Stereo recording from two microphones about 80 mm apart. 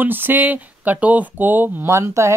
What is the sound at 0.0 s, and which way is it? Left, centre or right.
Speech, right.